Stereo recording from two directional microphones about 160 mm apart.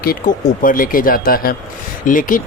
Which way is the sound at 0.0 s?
65° left (ahead or behind).